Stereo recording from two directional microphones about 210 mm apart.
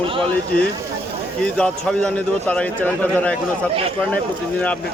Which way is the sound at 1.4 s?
5° left (ahead or behind).